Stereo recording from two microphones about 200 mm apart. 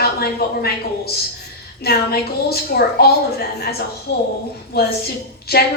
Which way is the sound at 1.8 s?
50° left (ahead or behind).